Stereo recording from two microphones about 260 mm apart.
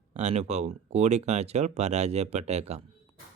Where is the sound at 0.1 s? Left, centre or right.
Right.